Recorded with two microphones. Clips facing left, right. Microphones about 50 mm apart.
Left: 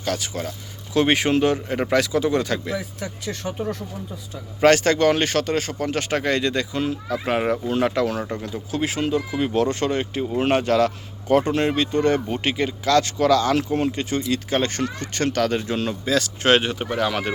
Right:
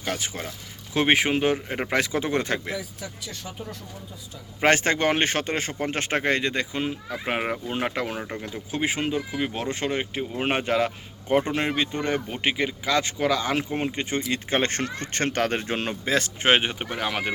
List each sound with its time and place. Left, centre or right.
0.0 s speech: right
2.7 s speech: left
3.4 s speech: left
4.6 s speech: right
9.0 s speech: centre